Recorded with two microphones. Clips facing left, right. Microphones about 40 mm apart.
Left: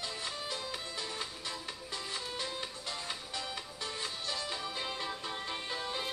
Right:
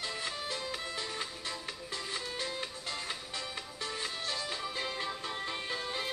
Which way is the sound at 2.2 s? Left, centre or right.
Centre.